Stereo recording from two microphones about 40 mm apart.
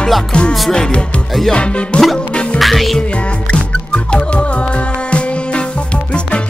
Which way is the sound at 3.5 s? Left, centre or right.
Left.